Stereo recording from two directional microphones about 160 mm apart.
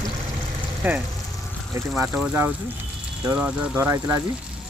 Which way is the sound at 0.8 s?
10° right (ahead or behind).